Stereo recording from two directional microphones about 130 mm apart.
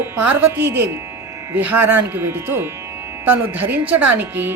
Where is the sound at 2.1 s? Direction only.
15° right (ahead or behind).